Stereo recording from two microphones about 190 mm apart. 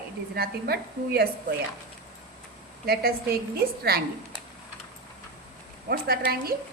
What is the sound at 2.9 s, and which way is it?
Speech, 55° right (ahead or behind).